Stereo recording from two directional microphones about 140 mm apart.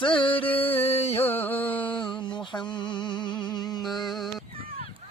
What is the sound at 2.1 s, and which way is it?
Music, 35° left (ahead or behind).